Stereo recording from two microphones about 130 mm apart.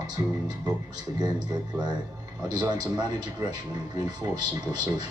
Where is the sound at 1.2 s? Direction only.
35° right (ahead or behind).